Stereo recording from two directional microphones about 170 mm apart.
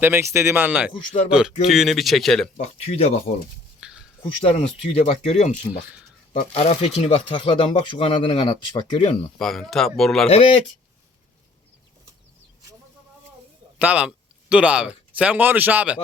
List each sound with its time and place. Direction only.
0.0 s a man's voice: 15° right (ahead or behind); by 2.5 s centre (ahead or behind)
2.6 s speech: 35° left (ahead or behind)
3.8 s a sound: 5° right (ahead or behind)
4.2 s speech: 30° left (ahead or behind)
6.5 s speech: 35° left (ahead or behind)
9.4 s speech: centre (ahead or behind)
10.2 s speech: 35° left (ahead or behind)
13.7 s a man's voice: 5° right (ahead or behind)